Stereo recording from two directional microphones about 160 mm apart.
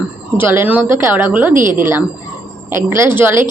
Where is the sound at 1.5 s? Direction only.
55° right (ahead or behind).